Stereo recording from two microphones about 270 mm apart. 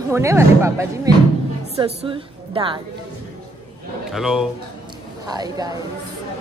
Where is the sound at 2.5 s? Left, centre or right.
Centre.